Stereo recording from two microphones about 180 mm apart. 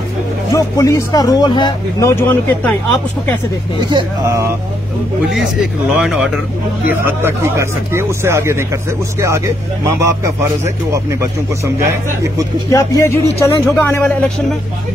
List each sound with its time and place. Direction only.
0.5 s speech: 15° left (ahead or behind)
3.9 s speech: 15° right (ahead or behind)
5.3 s speech: 5° right (ahead or behind)
9.9 s speech: 15° right (ahead or behind)
12.6 s speech: 15° left (ahead or behind)